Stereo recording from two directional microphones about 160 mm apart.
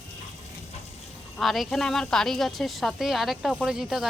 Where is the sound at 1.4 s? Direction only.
Centre (ahead or behind).